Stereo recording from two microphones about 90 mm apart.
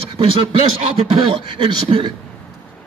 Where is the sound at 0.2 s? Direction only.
65° right (ahead or behind).